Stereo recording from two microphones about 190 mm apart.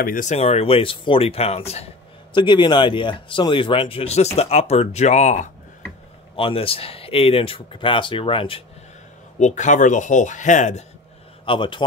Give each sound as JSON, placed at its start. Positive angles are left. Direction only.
{"t": 0.0, "sound": "speech", "side_deg": 45}
{"t": 6.3, "sound": "speech", "side_deg": 30}
{"t": 9.4, "sound": "speech", "side_deg": 40}
{"t": 11.4, "sound": "speech", "side_deg": 25}